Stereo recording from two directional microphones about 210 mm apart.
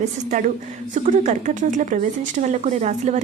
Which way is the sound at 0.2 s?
40° right (ahead or behind).